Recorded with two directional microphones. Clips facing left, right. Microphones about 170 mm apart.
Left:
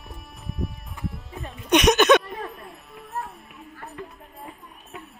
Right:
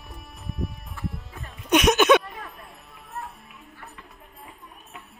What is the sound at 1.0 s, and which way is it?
Music, 20° left (ahead or behind).